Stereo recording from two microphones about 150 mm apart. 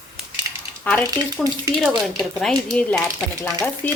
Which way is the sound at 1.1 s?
25° right (ahead or behind).